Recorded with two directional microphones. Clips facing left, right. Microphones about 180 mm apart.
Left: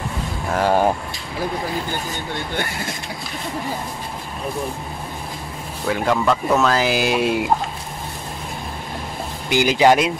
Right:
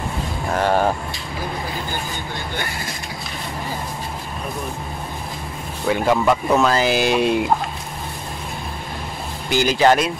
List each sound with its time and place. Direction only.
0.5 s speech: 10° left (ahead or behind)
5.9 s speech: 5° right (ahead or behind)
9.5 s speech: 15° left (ahead or behind)